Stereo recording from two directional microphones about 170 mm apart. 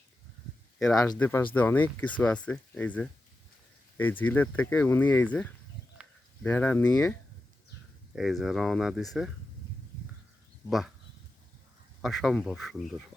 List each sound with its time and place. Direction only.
0.9 s speech: 20° left (ahead or behind)
6.0 s a sound: 5° right (ahead or behind)
6.4 s speech: 10° left (ahead or behind)
8.1 s speech: centre (ahead or behind)
10.7 s speech: centre (ahead or behind)
12.0 s speech: centre (ahead or behind)